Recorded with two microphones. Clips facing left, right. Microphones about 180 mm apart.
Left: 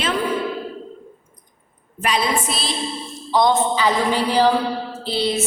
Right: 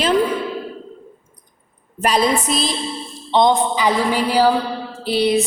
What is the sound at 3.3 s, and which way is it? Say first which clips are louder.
A woman's voice: right 2 dB; 20° right (ahead or behind).